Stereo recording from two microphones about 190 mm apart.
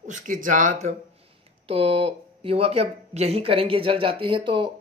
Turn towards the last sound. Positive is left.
turn(degrees=-25)  # may be behind; listen again after turning